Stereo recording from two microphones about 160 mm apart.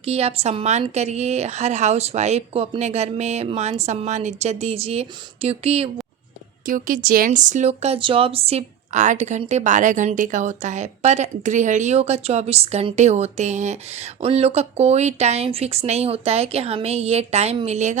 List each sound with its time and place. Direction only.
0.0 s a woman's voice: 40° right (ahead or behind)
6.7 s a woman's voice: 55° right (ahead or behind)